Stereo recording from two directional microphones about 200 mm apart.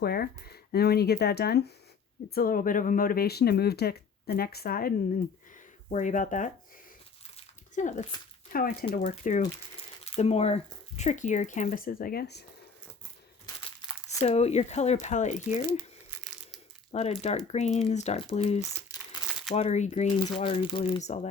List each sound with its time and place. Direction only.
0.0 s speech: 50° left (ahead or behind)
5.5 s a sound: 40° left (ahead or behind)
8.5 s speech: 45° left (ahead or behind)
13.4 s crumpling: 20° left (ahead or behind)
14.2 s speech: 30° left (ahead or behind)
17.2 s speech: 35° left (ahead or behind)